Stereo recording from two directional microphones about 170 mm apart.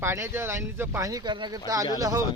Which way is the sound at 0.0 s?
15° right (ahead or behind).